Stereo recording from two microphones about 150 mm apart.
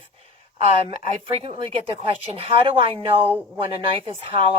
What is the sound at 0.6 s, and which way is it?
Speech, 40° right (ahead or behind).